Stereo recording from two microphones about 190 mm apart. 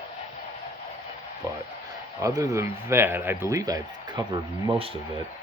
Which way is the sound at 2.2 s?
15° right (ahead or behind).